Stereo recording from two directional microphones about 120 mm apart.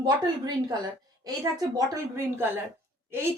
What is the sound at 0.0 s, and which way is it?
A woman's voice, 35° right (ahead or behind).